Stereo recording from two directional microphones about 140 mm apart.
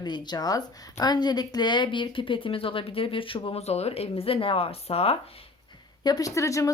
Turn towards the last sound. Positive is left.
turn(degrees=20)  # may be behind; listen again after turning